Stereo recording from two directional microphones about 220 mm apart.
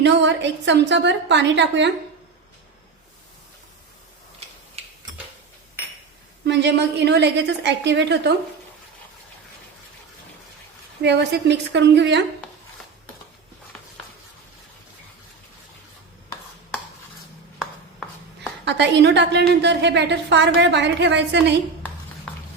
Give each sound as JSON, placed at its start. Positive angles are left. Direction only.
{"t": 0.0, "sound": "a woman's voice", "side_deg": -55}
{"t": 6.4, "sound": "a woman's voice", "side_deg": -50}
{"t": 11.0, "sound": "a woman's voice", "side_deg": -50}
{"t": 18.6, "sound": "a woman's voice", "side_deg": -50}